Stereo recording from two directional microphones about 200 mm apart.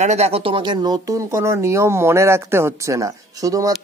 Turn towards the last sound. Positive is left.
turn(degrees=-15)  # may be behind; listen again after turning